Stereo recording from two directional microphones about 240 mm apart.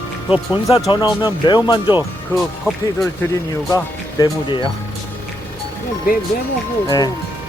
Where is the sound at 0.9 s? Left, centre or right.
Centre.